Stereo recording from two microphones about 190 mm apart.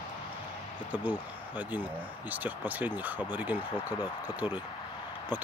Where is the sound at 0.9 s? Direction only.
10° right (ahead or behind).